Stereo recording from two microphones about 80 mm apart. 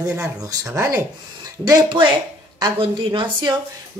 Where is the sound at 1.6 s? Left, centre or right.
Right.